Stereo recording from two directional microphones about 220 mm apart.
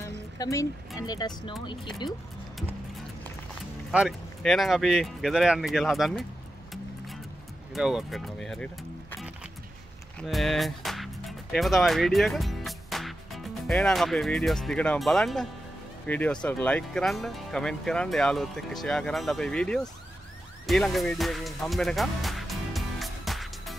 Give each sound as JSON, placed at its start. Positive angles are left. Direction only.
{"t": 0.4, "sound": "speech", "side_deg": 15}
{"t": 3.9, "sound": "speech", "side_deg": 0}
{"t": 7.7, "sound": "speech", "side_deg": 0}
{"t": 10.1, "sound": "speech", "side_deg": 0}
{"t": 20.6, "sound": "music", "side_deg": 0}